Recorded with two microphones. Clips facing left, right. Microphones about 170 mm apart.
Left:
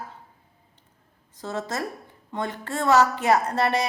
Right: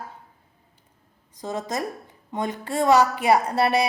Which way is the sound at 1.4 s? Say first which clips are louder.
Right 1 dB; 15° right (ahead or behind).